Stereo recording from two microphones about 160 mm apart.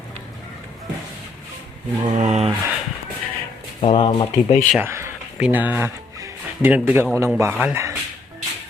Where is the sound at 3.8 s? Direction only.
30° left (ahead or behind).